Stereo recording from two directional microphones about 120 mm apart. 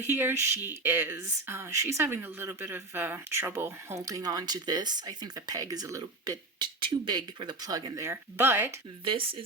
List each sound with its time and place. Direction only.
0.0 s speech: 20° right (ahead or behind)
9.0 s speech: 45° right (ahead or behind)